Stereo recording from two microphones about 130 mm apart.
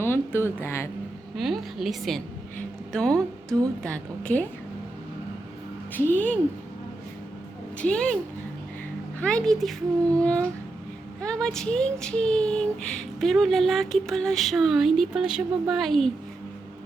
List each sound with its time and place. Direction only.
0.0 s speech: 20° left (ahead or behind)
1.4 s speech: centre (ahead or behind)
2.6 s a sound: 5° left (ahead or behind)
3.8 s a child's voice: 10° left (ahead or behind)
5.9 s a child's voice: 15° left (ahead or behind)
7.8 s a child's voice: 10° left (ahead or behind)
9.2 s a child's voice: 5° left (ahead or behind)